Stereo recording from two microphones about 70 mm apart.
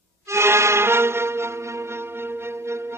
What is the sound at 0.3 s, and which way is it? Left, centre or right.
Music, right.